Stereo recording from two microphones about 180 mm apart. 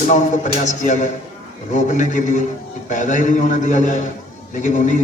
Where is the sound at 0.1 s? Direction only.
40° left (ahead or behind).